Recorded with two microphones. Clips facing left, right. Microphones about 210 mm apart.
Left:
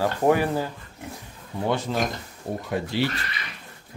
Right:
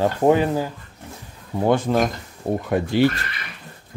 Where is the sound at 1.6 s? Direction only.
50° right (ahead or behind).